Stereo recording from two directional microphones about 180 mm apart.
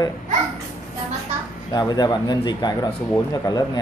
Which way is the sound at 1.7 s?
20° left (ahead or behind).